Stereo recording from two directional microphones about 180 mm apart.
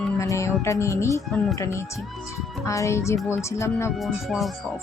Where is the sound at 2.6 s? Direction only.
15° left (ahead or behind).